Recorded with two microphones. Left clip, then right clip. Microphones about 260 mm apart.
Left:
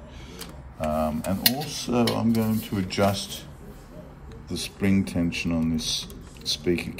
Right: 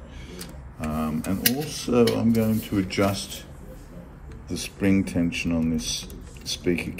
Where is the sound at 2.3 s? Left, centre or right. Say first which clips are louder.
Right 2 dB; left.